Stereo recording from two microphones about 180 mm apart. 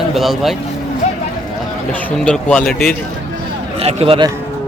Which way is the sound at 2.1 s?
5° left (ahead or behind).